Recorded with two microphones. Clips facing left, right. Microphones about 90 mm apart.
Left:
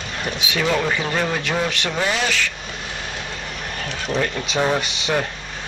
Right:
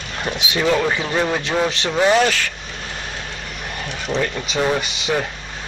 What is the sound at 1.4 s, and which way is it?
Speech, 25° right (ahead or behind).